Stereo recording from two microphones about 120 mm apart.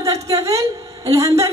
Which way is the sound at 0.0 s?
25° right (ahead or behind).